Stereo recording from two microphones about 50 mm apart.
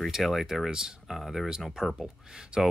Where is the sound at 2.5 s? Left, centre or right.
Centre.